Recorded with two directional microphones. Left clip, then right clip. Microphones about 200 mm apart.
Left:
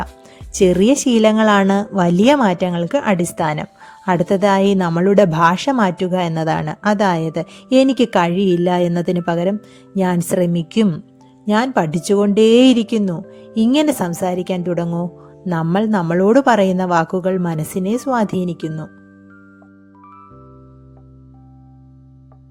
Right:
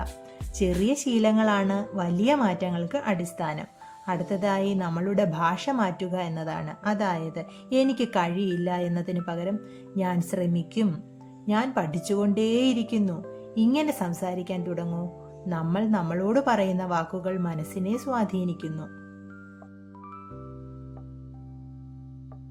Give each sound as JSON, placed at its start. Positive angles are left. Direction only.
{"t": 0.5, "sound": "a woman's voice", "side_deg": 50}